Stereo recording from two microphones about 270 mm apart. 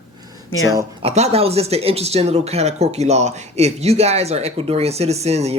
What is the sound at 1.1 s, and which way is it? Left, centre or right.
Speech, right.